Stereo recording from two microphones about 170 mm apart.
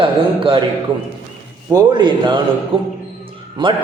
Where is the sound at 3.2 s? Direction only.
30° right (ahead or behind).